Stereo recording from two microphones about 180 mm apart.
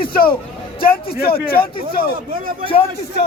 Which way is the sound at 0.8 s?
55° left (ahead or behind).